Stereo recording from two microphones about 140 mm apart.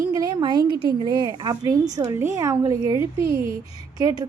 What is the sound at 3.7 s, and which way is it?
Speech, 25° right (ahead or behind).